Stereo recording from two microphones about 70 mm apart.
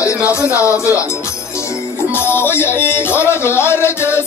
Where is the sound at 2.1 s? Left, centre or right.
Left.